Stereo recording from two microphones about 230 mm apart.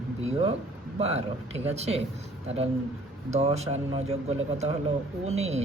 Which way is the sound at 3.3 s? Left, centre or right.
Right.